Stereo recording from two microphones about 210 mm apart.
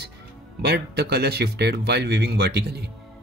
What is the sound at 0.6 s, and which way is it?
A man's voice, 50° right (ahead or behind).